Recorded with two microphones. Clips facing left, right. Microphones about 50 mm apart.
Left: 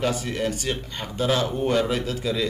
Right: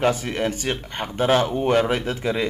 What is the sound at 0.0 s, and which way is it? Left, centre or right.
A man's voice, right.